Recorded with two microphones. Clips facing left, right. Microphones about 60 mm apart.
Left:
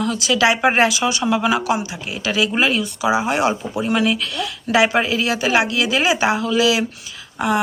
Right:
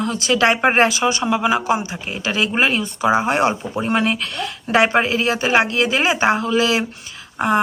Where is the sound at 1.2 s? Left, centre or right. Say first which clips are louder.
Left 1 dB; centre; by 3.5 s right.